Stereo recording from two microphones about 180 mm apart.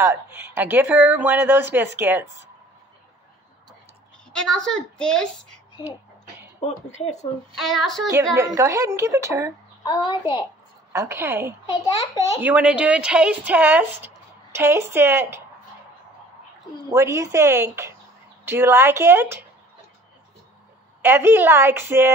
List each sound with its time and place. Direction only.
0.0 s a woman's voice: 15° right (ahead or behind)
4.3 s a woman's voice: 5° left (ahead or behind)
6.6 s speech: 35° left (ahead or behind)
7.5 s a woman's voice: centre (ahead or behind)
8.4 s a woman's voice: 15° right (ahead or behind)
9.8 s a child's voice: 25° left (ahead or behind)
10.9 s a woman's voice: 15° right (ahead or behind)
11.6 s a child's voice: 20° left (ahead or behind)
12.4 s a woman's voice: 10° right (ahead or behind)
16.9 s a woman's voice: 15° right (ahead or behind)
21.0 s a woman's voice: 10° right (ahead or behind)